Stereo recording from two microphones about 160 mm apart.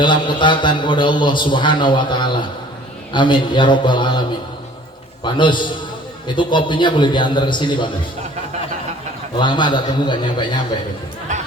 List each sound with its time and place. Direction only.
0.0 s a man's voice: 30° left (ahead or behind)
9.4 s a man's voice: 30° left (ahead or behind)
11.3 s speech: 50° right (ahead or behind)